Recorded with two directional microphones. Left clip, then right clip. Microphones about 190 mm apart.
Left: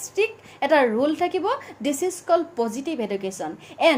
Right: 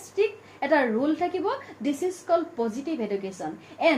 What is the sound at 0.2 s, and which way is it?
A woman's voice, 45° left (ahead or behind).